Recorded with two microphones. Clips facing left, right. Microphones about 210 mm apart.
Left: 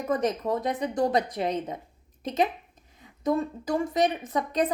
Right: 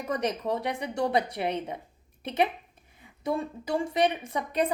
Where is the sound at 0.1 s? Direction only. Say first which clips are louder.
Left 3 dB; 15° right (ahead or behind).